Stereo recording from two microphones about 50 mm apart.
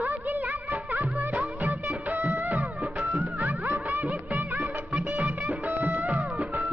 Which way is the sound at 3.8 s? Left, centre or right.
Right.